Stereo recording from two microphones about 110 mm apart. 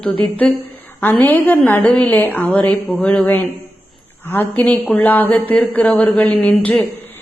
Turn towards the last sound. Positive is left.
turn(degrees=10)  # may be behind; listen again after turning